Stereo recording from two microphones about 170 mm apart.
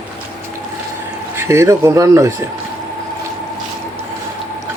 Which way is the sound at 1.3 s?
15° right (ahead or behind).